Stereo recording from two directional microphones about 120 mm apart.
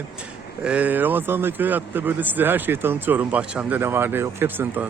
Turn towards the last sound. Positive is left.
turn(degrees=-15)  # may be behind; listen again after turning